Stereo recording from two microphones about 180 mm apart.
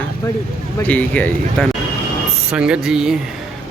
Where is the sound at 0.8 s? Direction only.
10° left (ahead or behind).